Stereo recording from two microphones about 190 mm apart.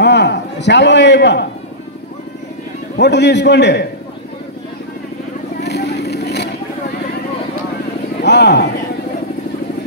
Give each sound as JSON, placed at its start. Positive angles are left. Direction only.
{"t": 0.0, "sound": "a sound", "side_deg": 60}
{"t": 3.0, "sound": "a man's voice", "side_deg": 65}
{"t": 5.6, "sound": "vehicle", "side_deg": 60}
{"t": 8.2, "sound": "speech", "side_deg": 60}